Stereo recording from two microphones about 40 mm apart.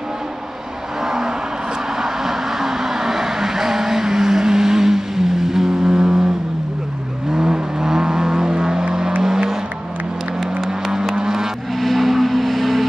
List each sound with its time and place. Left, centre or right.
1.0 s vehicle: centre
7.3 s vehicle: centre
9.2 s a sound: centre
10.6 s vehicle: centre
11.8 s vehicle: centre